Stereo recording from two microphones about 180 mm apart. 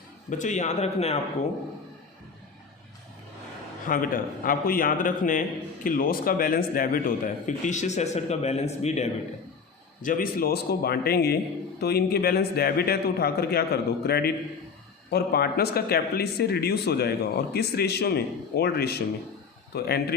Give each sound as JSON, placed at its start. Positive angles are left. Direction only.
{"t": 0.3, "sound": "a man's voice", "side_deg": 45}
{"t": 3.8, "sound": "a man's voice", "side_deg": 50}
{"t": 10.0, "sound": "speech", "side_deg": 50}